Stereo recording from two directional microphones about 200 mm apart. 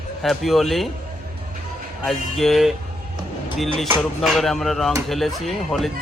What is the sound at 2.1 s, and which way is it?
Speech, centre (ahead or behind).